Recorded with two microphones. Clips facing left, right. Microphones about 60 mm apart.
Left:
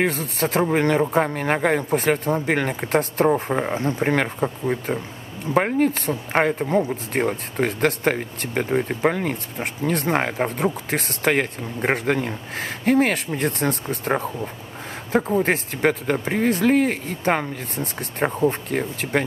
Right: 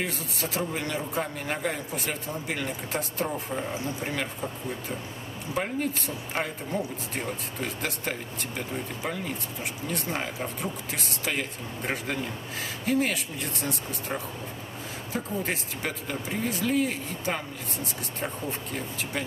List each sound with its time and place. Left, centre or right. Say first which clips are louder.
0.0 s speech: left 10 dB; left